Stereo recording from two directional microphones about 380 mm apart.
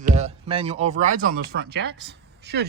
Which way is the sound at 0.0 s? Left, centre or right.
Centre.